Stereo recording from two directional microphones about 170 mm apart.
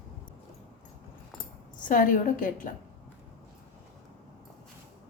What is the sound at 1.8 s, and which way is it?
Speech, 55° left (ahead or behind).